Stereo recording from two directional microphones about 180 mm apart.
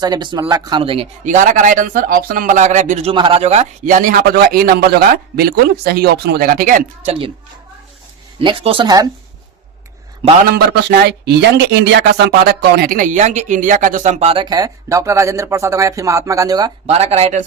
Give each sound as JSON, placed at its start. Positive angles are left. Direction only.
{"t": 0.0, "sound": "a man's voice", "side_deg": -25}
{"t": 3.1, "sound": "a man's voice", "side_deg": -30}
{"t": 8.4, "sound": "speech", "side_deg": -30}
{"t": 10.4, "sound": "speech", "side_deg": -60}
{"t": 16.8, "sound": "speech", "side_deg": -35}